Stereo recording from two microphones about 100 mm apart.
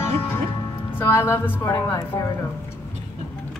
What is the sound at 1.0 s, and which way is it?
Music, 25° left (ahead or behind).